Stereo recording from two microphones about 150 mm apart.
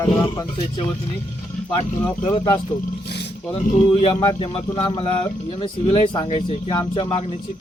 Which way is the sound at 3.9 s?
35° left (ahead or behind).